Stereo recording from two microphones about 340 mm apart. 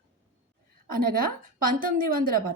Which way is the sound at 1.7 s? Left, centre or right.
Right.